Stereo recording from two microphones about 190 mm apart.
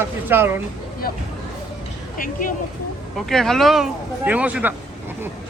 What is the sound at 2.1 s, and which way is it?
Speech, 45° left (ahead or behind).